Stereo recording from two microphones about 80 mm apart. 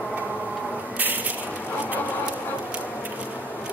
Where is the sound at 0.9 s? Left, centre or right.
Right.